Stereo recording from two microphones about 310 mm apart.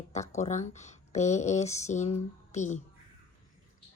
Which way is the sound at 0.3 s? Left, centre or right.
Left.